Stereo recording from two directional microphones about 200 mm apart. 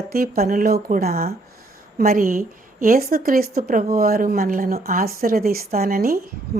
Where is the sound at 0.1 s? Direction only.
50° right (ahead or behind).